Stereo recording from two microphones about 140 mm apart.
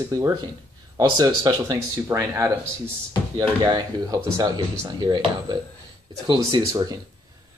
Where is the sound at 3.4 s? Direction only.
30° right (ahead or behind).